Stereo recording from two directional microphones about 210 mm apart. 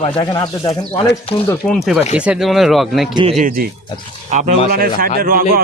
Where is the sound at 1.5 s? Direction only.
Centre (ahead or behind).